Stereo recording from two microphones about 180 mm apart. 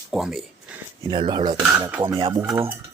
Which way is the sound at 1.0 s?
25° right (ahead or behind).